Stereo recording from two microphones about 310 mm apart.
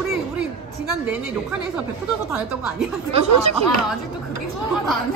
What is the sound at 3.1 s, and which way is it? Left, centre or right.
Speech, centre.